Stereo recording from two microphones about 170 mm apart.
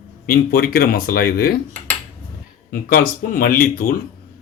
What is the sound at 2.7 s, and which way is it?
Speech, 55° left (ahead or behind).